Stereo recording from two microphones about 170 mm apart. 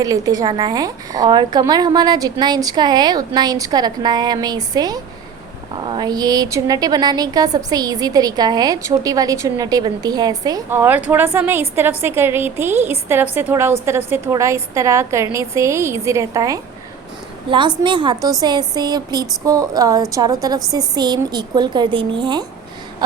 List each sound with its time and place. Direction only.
0.0 s a woman's voice: 20° right (ahead or behind)
17.8 s a woman's voice: 30° right (ahead or behind)